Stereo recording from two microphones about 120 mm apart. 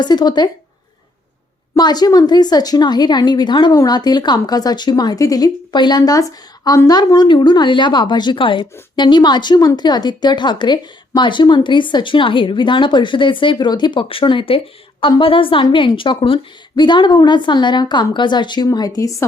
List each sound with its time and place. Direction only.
0.0 s speech: 35° left (ahead or behind)
1.7 s a woman's voice: 35° left (ahead or behind)